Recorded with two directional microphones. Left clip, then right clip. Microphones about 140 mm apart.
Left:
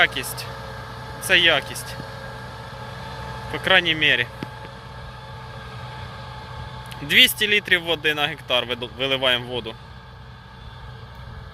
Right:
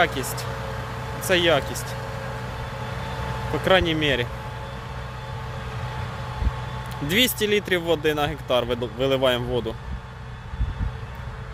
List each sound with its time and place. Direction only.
0.0 s speech: 20° right (ahead or behind)
0.3 s vehicle: 15° right (ahead or behind)
2.8 s vehicle: 5° right (ahead or behind); by 4.3 s 20° right (ahead or behind)
7.1 s speech: 20° right (ahead or behind)